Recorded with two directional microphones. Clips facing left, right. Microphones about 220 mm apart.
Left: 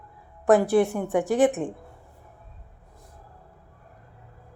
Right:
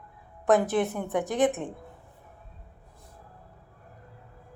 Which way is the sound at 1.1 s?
Centre (ahead or behind).